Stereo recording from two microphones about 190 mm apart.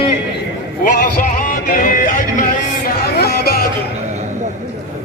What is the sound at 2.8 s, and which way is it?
Music, 55° left (ahead or behind).